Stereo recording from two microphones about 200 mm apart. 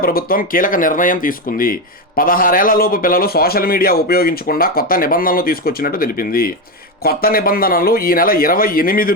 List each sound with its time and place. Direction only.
0.0 s speech: 45° left (ahead or behind)